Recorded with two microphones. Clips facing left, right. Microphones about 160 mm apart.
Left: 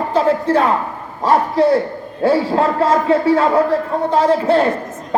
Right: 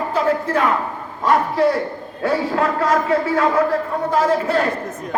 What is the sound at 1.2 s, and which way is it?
A man's voice, 30° left (ahead or behind).